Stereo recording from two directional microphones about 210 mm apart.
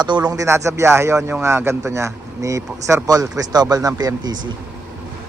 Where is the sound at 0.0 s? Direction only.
20° right (ahead or behind).